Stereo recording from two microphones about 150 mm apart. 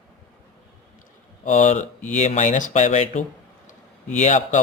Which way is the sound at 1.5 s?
55° left (ahead or behind).